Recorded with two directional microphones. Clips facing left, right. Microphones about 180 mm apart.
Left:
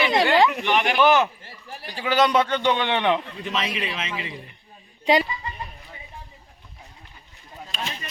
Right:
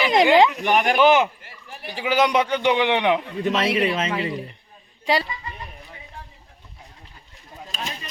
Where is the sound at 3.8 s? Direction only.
40° right (ahead or behind).